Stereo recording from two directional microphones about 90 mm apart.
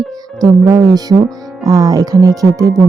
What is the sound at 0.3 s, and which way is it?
Speech, 50° right (ahead or behind).